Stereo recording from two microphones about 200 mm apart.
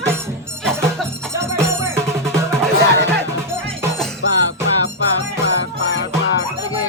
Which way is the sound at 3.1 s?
5° left (ahead or behind).